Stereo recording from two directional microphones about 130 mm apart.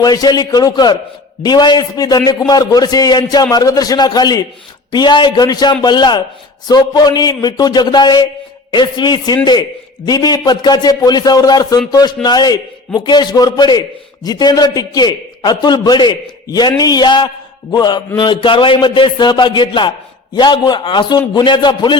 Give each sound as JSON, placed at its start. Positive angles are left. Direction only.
{"t": 0.0, "sound": "a man's voice", "side_deg": 30}